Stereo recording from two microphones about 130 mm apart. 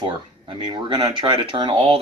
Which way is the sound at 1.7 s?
45° right (ahead or behind).